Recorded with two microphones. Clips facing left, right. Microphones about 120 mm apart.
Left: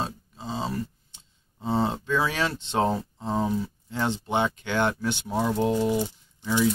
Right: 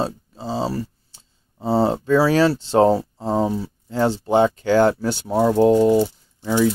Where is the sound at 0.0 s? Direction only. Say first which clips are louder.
Right 7 dB; 35° right (ahead or behind).